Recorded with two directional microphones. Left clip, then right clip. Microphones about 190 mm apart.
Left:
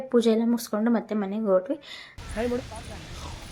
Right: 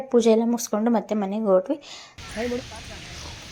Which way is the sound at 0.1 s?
10° right (ahead or behind).